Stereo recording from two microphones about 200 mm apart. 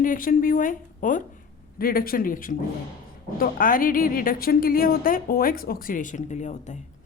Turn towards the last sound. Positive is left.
turn(degrees=35)  # may be behind; listen again after turning